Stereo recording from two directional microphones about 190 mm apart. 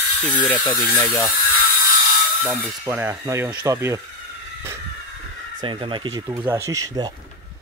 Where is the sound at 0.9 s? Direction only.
10° left (ahead or behind).